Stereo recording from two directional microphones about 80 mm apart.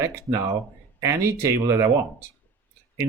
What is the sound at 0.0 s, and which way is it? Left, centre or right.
Speech, right.